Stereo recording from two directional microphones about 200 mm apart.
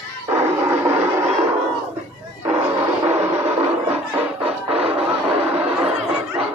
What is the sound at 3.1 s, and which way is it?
Music, 30° right (ahead or behind).